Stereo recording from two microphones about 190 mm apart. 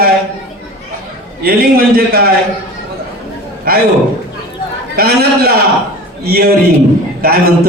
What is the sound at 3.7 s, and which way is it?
Speech, 50° right (ahead or behind).